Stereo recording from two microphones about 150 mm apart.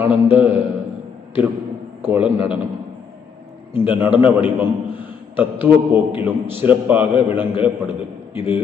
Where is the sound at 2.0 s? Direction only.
15° right (ahead or behind).